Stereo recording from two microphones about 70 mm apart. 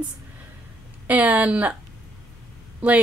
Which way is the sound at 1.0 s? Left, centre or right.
Right.